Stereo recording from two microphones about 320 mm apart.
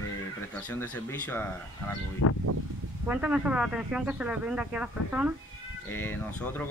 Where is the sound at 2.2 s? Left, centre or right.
Left.